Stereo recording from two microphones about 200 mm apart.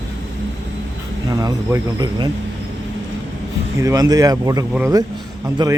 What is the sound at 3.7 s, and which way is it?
Speech, 15° right (ahead or behind).